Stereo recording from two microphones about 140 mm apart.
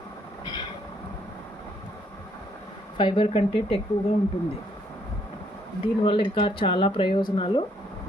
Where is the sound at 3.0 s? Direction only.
40° left (ahead or behind).